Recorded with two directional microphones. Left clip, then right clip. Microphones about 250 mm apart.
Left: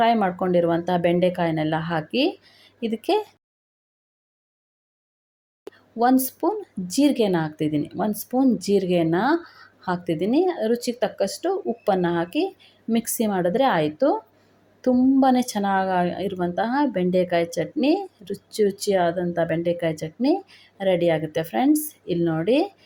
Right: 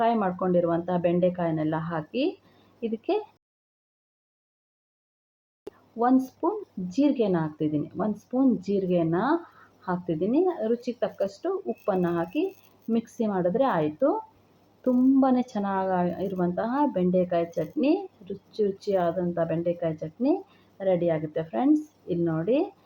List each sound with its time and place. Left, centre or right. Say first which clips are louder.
0.0 s speech: left 5 dB; left
5.7 s a sound: left 1 dB; centre
6.0 s speech: left 4 dB; left